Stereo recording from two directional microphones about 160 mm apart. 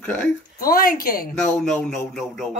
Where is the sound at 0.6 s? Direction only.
65° left (ahead or behind).